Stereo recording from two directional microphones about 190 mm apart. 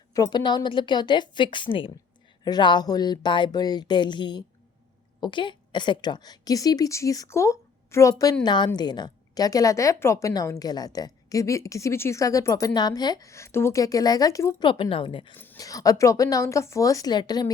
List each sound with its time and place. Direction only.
0.1 s a woman's voice: 20° left (ahead or behind)
15.4 s speech: 15° left (ahead or behind)